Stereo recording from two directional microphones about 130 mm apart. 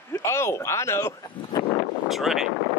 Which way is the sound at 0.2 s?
20° left (ahead or behind).